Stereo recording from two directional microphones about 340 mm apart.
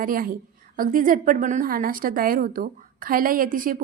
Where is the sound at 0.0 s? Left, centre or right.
Right.